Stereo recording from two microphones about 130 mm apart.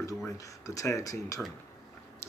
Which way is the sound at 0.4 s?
25° left (ahead or behind).